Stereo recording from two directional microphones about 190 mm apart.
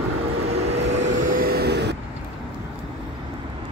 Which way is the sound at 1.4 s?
55° right (ahead or behind).